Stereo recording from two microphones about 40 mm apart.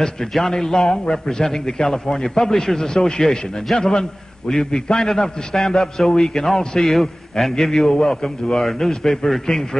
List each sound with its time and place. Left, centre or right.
0.5 s a man's voice: centre
6.8 s a man's voice: centre